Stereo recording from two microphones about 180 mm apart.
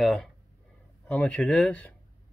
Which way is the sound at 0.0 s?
Centre (ahead or behind).